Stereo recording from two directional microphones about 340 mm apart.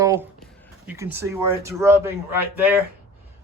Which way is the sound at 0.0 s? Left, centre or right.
Centre.